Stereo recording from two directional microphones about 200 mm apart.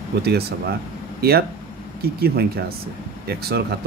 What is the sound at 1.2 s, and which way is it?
Speech, 50° right (ahead or behind).